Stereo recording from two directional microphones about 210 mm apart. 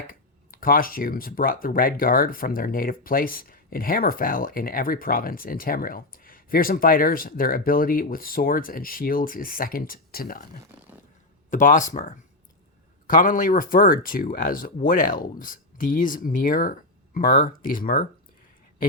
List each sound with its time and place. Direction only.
0.1 s speech: 45° left (ahead or behind)
11.5 s speech: 35° left (ahead or behind)